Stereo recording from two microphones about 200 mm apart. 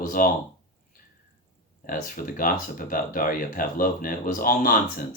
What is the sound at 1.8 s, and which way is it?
Speech, 45° left (ahead or behind).